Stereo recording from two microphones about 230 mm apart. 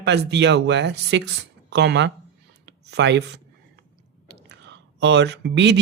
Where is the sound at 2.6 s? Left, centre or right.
Right.